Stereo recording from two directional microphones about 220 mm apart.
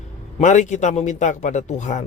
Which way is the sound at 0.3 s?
35° left (ahead or behind).